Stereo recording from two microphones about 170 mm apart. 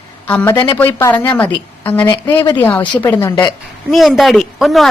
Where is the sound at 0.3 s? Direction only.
10° left (ahead or behind).